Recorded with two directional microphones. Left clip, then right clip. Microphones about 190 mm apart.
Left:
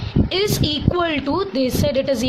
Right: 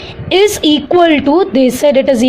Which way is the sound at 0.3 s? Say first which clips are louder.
Right 13 dB; 20° right (ahead or behind).